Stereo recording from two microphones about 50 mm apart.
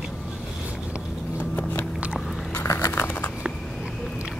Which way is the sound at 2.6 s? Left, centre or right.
Left.